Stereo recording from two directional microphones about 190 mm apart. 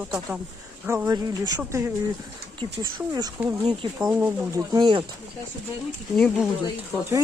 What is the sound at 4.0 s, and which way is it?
Speech, 5° right (ahead or behind).